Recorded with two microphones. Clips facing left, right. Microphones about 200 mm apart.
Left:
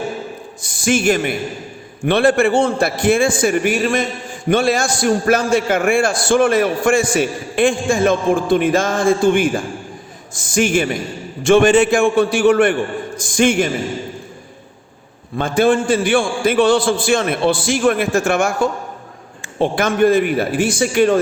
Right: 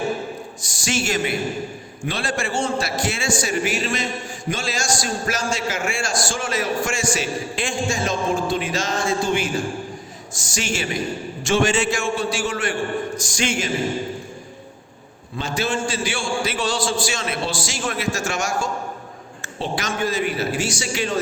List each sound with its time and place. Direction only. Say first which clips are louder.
0.6 s a man's voice: left 9 dB; 55° left (ahead or behind)
15.4 s a man's voice: left 10 dB; 55° left (ahead or behind)